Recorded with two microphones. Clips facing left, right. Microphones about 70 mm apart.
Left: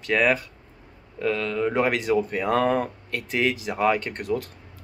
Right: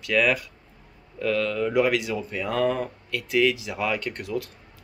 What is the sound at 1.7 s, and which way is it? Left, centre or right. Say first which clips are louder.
Speech: left 1 dB; left.